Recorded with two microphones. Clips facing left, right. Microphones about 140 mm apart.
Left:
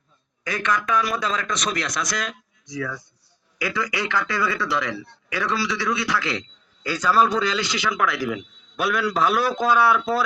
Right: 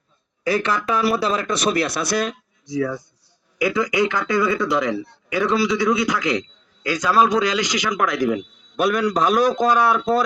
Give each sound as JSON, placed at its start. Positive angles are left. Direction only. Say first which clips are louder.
{"t": 0.4, "sound": "a man's voice", "louder": "right 4 dB", "side_deg": -30}